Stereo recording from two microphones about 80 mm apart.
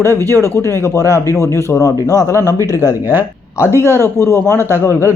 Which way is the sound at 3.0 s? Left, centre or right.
Right.